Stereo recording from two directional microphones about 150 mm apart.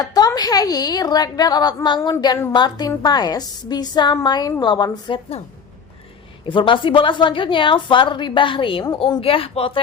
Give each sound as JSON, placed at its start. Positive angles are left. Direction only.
{"t": 0.0, "sound": "a woman's voice", "side_deg": 25}
{"t": 6.4, "sound": "a woman's voice", "side_deg": 35}